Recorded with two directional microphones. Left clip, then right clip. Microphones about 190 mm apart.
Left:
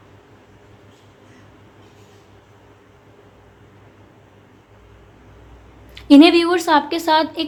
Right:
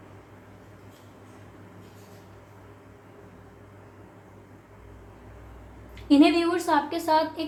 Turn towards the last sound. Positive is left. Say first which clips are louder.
# left 7 dB
turn(degrees=55)  # may be behind; listen again after turning